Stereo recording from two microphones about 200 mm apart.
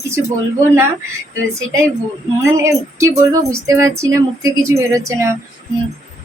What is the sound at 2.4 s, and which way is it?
Speech, 15° right (ahead or behind).